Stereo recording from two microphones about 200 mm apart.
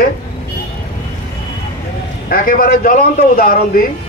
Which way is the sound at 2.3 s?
45° left (ahead or behind).